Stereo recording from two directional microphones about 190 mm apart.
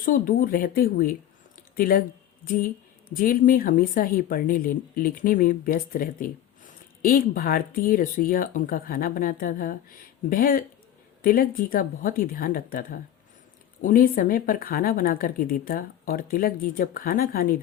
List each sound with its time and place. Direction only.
0.0 s a woman's voice: 45° left (ahead or behind)